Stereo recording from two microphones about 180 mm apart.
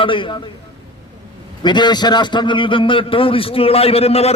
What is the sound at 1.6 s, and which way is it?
A man's voice, 25° left (ahead or behind).